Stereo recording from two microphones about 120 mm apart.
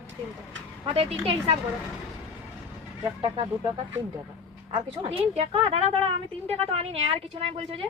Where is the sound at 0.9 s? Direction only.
50° right (ahead or behind).